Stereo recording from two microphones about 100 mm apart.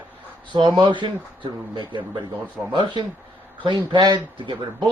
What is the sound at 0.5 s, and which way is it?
Speech, 50° right (ahead or behind).